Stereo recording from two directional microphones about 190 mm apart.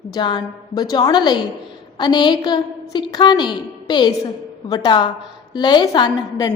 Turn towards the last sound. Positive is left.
turn(degrees=20)  # may be behind; listen again after turning